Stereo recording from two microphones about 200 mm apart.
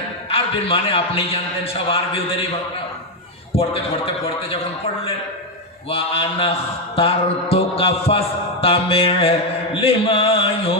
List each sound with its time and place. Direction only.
0.3 s a man's voice: 30° left (ahead or behind)
1.6 s mantra: 30° left (ahead or behind)
3.5 s mantra: 30° left (ahead or behind)
5.9 s mantra: 30° left (ahead or behind)